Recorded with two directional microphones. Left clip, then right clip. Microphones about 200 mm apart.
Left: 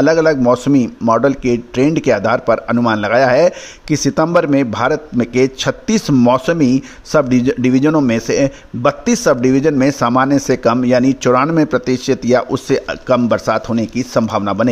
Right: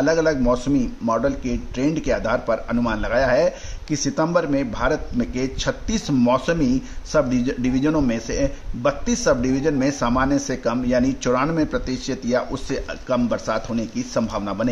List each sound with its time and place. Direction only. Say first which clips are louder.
0.0 s a man's voice: left 7 dB; 40° left (ahead or behind)